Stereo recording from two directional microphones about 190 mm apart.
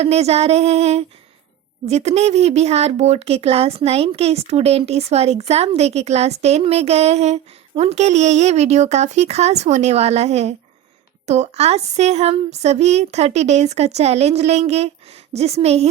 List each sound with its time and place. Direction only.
0.0 s speech: 35° right (ahead or behind)